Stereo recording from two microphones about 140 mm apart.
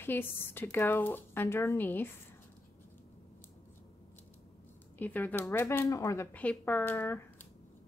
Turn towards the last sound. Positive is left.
turn(degrees=15)  # may be behind; listen again after turning